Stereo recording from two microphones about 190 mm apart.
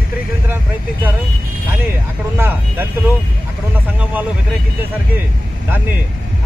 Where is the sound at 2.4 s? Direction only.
10° right (ahead or behind).